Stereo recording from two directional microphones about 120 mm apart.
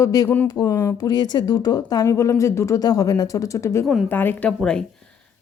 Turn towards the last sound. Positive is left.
turn(degrees=15)  # may be behind; listen again after turning